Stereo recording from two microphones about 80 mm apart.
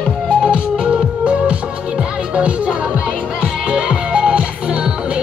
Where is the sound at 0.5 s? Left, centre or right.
Centre.